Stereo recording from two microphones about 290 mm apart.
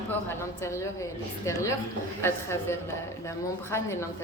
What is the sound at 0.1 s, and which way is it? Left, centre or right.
A woman's voice, centre.